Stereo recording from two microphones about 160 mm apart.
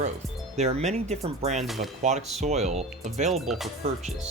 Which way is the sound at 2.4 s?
45° right (ahead or behind).